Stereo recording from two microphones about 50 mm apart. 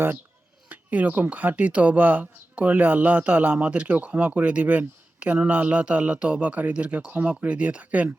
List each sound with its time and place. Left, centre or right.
0.7 s speech: right